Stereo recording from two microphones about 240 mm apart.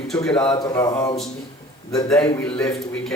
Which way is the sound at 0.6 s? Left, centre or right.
Centre.